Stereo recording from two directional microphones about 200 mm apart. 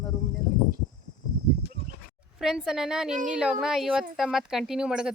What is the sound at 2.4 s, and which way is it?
Speech, 5° right (ahead or behind).